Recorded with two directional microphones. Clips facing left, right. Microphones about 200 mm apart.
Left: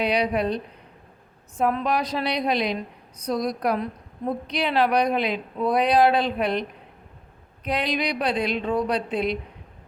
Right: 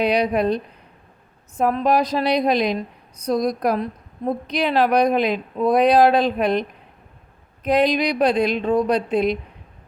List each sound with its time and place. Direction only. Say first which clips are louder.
0.0 s a woman's voice: right 4 dB; 45° right (ahead or behind)